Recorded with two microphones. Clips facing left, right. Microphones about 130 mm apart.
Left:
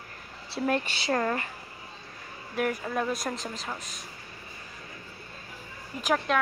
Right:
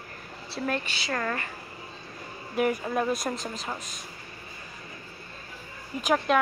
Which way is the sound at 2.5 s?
20° right (ahead or behind).